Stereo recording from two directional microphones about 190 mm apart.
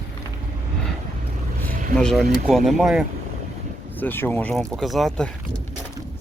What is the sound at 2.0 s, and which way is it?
Speech, 5° left (ahead or behind).